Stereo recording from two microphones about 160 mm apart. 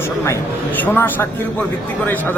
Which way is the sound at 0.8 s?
10° left (ahead or behind).